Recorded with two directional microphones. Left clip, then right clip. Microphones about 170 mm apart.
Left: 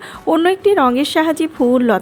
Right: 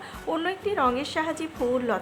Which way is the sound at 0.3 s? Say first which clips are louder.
Left 14 dB; 45° left (ahead or behind).